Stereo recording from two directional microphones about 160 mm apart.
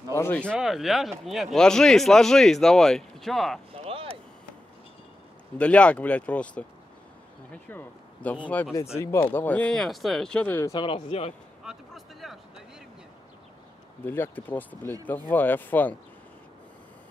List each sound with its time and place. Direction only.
0.1 s speech: 15° left (ahead or behind)
0.6 s speech: centre (ahead or behind)
3.7 s a sound: 35° right (ahead or behind)
5.6 s speech: 10° left (ahead or behind)
10.7 s speech: 30° left (ahead or behind)
11.6 s a sound: centre (ahead or behind)
14.0 s speech: 10° left (ahead or behind)